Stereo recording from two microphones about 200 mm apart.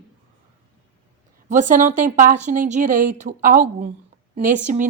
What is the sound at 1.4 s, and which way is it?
A woman's voice, 40° right (ahead or behind).